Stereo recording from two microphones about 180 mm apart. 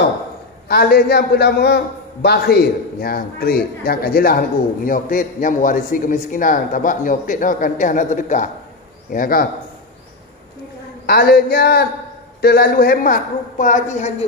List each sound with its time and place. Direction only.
0.7 s a man's voice: 60° left (ahead or behind)
11.1 s a man's voice: 60° left (ahead or behind); by 14.1 s 40° left (ahead or behind)